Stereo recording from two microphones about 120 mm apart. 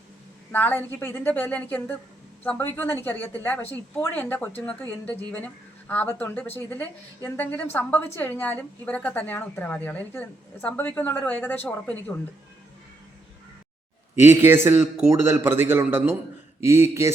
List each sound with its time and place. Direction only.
0.5 s speech: 15° left (ahead or behind)
14.3 s a man's voice: 20° right (ahead or behind)